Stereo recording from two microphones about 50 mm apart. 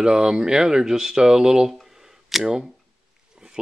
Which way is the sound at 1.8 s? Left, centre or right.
Centre.